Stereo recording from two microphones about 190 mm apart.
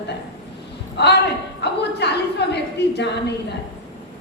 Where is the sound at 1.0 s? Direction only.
65° left (ahead or behind).